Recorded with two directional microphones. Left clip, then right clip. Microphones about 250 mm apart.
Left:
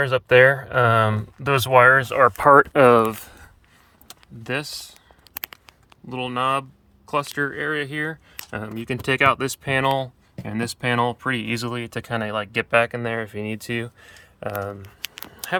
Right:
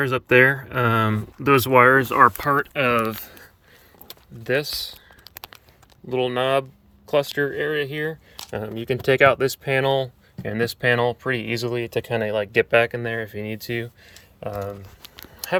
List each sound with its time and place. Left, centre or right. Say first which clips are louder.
0.0 s speech: left 2 dB; centre
2.8 s speech: left 6 dB; left
4.1 s speech: right 4 dB; centre
6.1 s speech: right 2 dB; centre
15.4 s a sound: right 2 dB; centre